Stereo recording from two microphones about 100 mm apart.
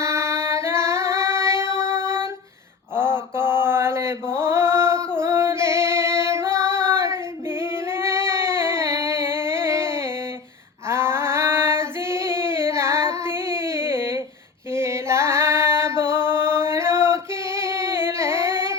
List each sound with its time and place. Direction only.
0.0 s music: 30° right (ahead or behind)
2.9 s mantra: 25° right (ahead or behind)
7.6 s singing: 25° right (ahead or behind)
10.8 s female singing: 25° right (ahead or behind)
14.7 s a sound: 25° right (ahead or behind)